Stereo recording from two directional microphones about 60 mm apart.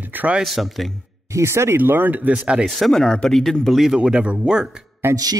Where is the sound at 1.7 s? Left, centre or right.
Right.